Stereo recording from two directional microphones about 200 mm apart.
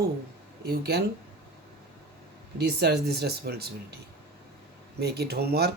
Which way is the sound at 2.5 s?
55° right (ahead or behind).